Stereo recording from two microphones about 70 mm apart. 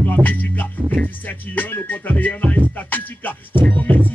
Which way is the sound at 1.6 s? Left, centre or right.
Left.